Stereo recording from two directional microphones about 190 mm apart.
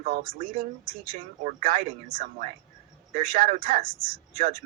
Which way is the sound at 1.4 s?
45° right (ahead or behind).